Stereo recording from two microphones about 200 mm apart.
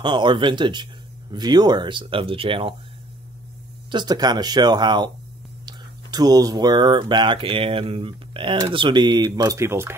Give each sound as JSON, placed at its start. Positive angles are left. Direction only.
{"t": 0.0, "sound": "speech", "side_deg": -25}
{"t": 3.9, "sound": "speech", "side_deg": -20}